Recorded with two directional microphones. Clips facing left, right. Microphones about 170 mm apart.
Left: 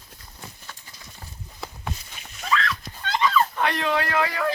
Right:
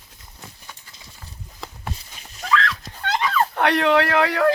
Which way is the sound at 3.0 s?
60° right (ahead or behind).